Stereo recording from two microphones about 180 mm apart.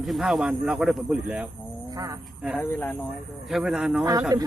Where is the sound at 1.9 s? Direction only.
20° right (ahead or behind).